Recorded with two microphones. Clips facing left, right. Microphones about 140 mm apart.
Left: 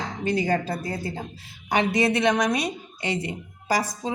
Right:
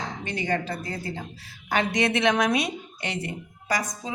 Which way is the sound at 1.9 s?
5° left (ahead or behind).